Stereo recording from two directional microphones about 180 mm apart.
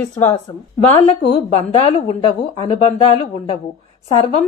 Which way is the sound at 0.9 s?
35° left (ahead or behind).